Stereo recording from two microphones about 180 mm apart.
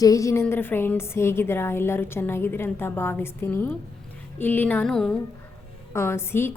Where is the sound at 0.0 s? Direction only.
20° left (ahead or behind).